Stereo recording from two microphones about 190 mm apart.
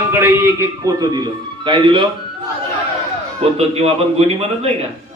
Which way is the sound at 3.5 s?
35° right (ahead or behind).